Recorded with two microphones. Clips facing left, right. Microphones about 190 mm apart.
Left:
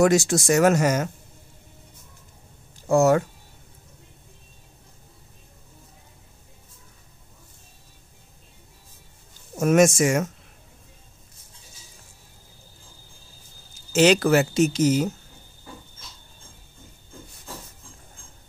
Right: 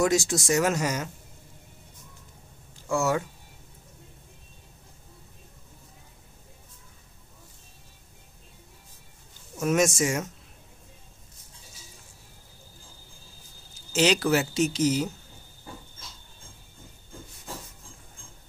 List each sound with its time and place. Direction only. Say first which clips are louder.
0.0 s speech: left 5 dB; 65° left (ahead or behind)
2.9 s speech: left 8 dB; 45° left (ahead or behind)
9.6 s speech: left 6 dB; 55° left (ahead or behind)
13.9 s speech: left 5 dB; 50° left (ahead or behind)